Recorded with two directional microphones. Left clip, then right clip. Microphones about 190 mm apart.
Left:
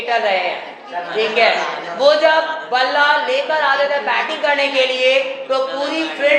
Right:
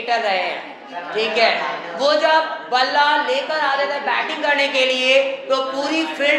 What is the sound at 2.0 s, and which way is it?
A woman's voice, 30° right (ahead or behind).